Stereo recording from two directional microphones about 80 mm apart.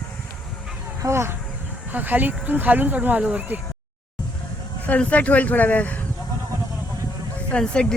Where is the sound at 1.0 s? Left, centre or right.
Right.